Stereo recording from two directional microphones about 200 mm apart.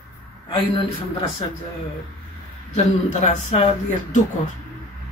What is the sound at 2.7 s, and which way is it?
Speech, 35° left (ahead or behind).